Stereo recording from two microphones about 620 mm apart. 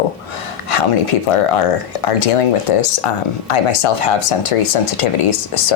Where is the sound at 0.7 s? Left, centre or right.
Left.